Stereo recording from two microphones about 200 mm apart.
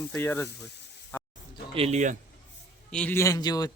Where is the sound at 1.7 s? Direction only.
30° right (ahead or behind).